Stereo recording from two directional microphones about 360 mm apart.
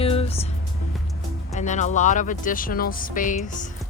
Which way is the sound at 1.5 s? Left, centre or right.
Centre.